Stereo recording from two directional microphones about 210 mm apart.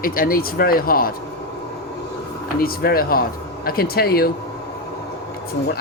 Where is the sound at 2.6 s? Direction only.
45° left (ahead or behind).